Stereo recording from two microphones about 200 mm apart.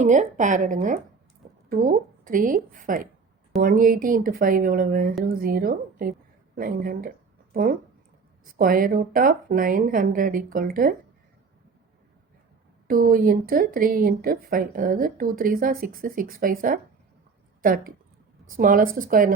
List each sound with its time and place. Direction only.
0.0 s speech: 40° right (ahead or behind)
12.9 s speech: 45° right (ahead or behind)